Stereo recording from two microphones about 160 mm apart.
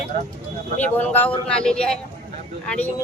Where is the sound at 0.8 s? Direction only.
10° left (ahead or behind).